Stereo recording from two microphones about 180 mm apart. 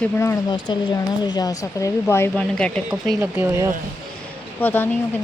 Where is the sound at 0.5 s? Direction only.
25° left (ahead or behind); by 3.2 s centre (ahead or behind).